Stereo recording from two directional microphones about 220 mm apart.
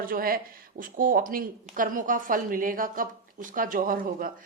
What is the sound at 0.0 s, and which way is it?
A woman's voice, 40° right (ahead or behind).